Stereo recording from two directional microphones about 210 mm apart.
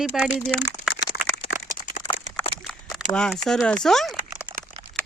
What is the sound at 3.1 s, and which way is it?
Speech, 5° left (ahead or behind).